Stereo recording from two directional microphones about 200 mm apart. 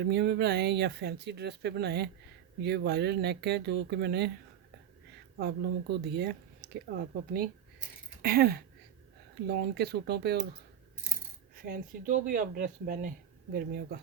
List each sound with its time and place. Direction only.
0.0 s speech: 55° right (ahead or behind)
5.4 s speech: 55° right (ahead or behind)
8.2 s speech: 50° right (ahead or behind)
11.5 s speech: 45° right (ahead or behind)